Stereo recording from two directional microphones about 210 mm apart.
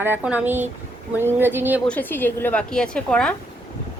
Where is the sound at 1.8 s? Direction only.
5° left (ahead or behind).